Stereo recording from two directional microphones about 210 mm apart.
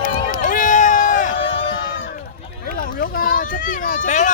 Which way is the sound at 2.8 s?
40° left (ahead or behind).